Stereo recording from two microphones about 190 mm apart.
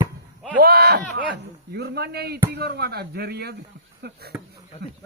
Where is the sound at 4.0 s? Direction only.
55° right (ahead or behind).